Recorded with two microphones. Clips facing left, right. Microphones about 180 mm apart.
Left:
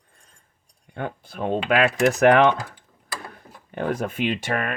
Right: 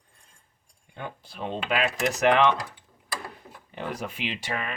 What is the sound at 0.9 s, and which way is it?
Speech, 55° left (ahead or behind).